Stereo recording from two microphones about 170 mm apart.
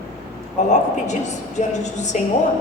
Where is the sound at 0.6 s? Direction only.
45° left (ahead or behind).